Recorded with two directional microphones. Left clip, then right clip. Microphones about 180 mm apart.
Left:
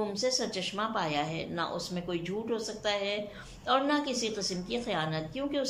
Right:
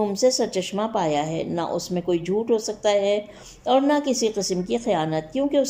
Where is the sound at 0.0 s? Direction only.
40° right (ahead or behind).